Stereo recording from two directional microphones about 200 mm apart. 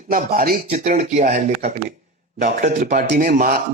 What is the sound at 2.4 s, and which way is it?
Speech, 50° right (ahead or behind).